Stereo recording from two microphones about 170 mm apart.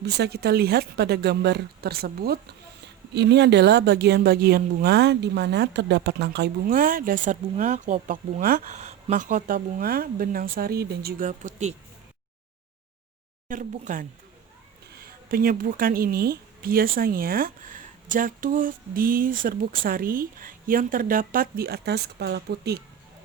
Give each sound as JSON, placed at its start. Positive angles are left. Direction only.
{"t": 0.0, "sound": "speech", "side_deg": -75}
{"t": 3.2, "sound": "speech", "side_deg": -85}
{"t": 8.7, "sound": "speech", "side_deg": -40}
{"t": 11.3, "sound": "speech", "side_deg": -45}
{"t": 13.5, "sound": "speech", "side_deg": -50}